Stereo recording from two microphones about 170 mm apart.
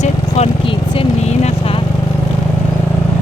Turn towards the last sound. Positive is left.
turn(degrees=35)  # may be behind; listen again after turning